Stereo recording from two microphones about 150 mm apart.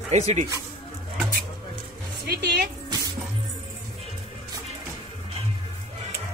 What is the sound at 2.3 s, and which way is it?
Speech, 90° right.